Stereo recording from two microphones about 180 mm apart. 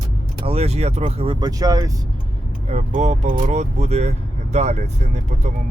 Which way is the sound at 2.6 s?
40° right (ahead or behind).